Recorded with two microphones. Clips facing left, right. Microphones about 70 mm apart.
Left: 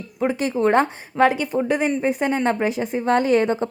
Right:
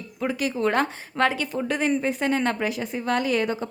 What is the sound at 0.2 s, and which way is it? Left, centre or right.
A woman's voice, left.